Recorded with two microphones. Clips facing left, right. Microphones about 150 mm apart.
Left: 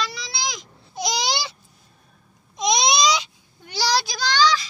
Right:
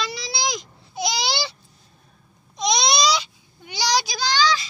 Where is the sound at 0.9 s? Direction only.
5° right (ahead or behind).